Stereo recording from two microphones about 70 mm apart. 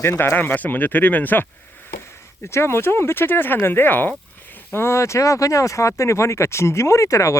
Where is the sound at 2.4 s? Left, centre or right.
Left.